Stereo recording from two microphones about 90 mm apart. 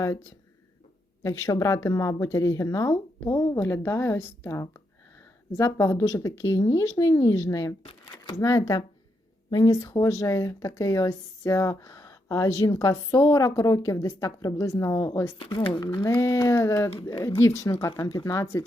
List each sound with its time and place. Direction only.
1.2 s a woman's voice: 35° left (ahead or behind)
15.4 s speech: 65° left (ahead or behind)
16.0 s speech: 30° left (ahead or behind)